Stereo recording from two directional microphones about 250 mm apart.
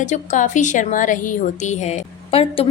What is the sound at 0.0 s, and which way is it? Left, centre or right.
A woman's voice, left.